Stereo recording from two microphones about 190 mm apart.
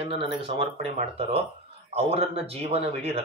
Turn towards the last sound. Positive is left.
turn(degrees=-30)  # may be behind; listen again after turning